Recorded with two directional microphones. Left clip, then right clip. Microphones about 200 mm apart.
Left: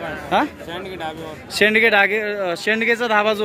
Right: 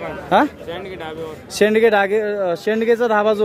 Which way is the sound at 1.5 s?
35° right (ahead or behind).